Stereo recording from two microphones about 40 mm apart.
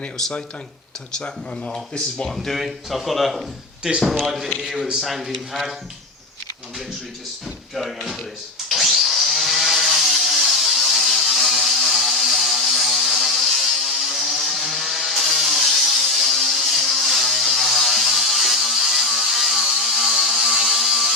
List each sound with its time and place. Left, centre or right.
1.1 s speech: centre
2.3 s speech: centre
4.9 s speech: centre
8.7 s chainsaw: centre